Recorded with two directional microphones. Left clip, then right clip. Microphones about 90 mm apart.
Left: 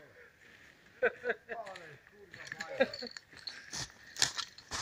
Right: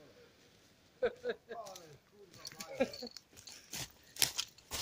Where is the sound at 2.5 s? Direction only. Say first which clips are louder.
Left 7 dB; 30° right (ahead or behind).